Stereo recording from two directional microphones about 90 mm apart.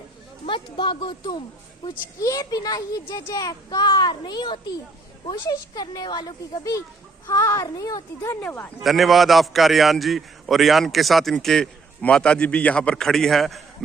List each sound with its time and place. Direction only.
0.4 s speech: 65° left (ahead or behind)
2.2 s a child's voice: 40° left (ahead or behind); by 4.7 s 60° left (ahead or behind)
5.3 s a child's voice: 50° left (ahead or behind)
8.4 s a man's voice: 20° left (ahead or behind)
8.8 s a man's voice: centre (ahead or behind)